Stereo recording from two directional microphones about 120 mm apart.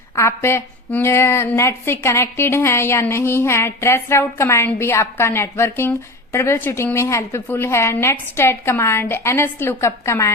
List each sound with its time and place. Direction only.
0.2 s a woman's voice: 20° left (ahead or behind)